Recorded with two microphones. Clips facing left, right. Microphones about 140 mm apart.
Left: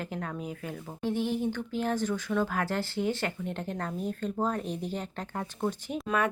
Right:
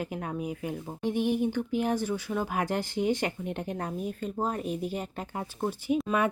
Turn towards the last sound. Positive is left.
turn(degrees=-10)  # may be behind; listen again after turning